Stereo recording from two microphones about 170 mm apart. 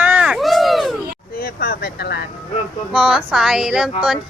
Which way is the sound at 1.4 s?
60° left (ahead or behind).